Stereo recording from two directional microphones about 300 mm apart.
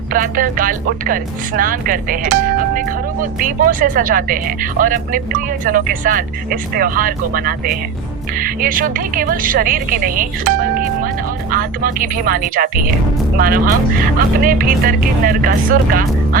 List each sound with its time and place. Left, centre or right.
0.1 s speech: right